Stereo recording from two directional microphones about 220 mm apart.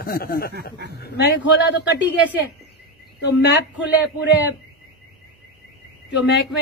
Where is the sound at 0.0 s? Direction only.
45° left (ahead or behind).